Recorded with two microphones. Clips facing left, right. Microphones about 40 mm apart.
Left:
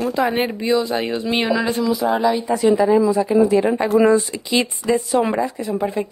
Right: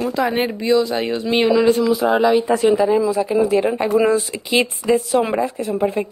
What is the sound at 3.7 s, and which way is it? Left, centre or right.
Speech, centre.